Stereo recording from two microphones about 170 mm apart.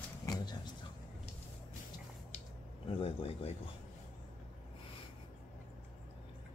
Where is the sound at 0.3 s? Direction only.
25° left (ahead or behind).